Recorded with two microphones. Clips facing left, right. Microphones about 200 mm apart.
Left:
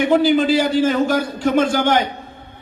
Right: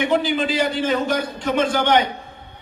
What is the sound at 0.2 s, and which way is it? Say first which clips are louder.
A man's voice: left 6 dB; 45° left (ahead or behind).